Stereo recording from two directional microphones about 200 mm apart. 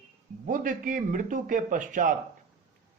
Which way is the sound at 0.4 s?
40° right (ahead or behind).